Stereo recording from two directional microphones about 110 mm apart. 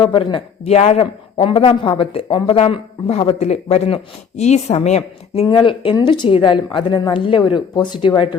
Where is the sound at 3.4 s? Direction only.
85° left.